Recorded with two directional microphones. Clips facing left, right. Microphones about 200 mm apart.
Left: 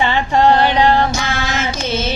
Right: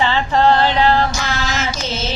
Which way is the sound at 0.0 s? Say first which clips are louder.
Left 1 dB; 15° left (ahead or behind).